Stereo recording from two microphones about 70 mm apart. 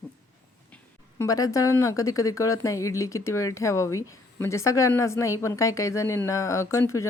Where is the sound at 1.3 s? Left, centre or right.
Left.